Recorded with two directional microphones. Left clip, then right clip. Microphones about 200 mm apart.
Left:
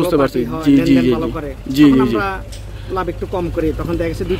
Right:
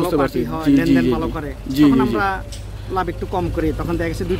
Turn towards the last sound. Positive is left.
turn(degrees=-15)  # may be behind; listen again after turning